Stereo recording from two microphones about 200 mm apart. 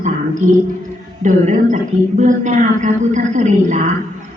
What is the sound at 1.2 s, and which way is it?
A man's voice, 40° right (ahead or behind).